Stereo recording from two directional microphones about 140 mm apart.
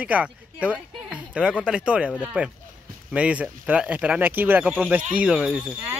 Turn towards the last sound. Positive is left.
turn(degrees=-5)  # may be behind; listen again after turning